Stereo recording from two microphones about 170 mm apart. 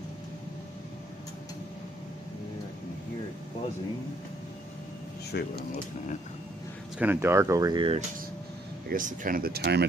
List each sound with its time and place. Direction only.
5.3 s speech: 70° left (ahead or behind)
7.0 s speech: 10° right (ahead or behind); by 8.0 s 30° right (ahead or behind)
8.8 s speech: 50° right (ahead or behind); by 9.8 s 75° right (ahead or behind)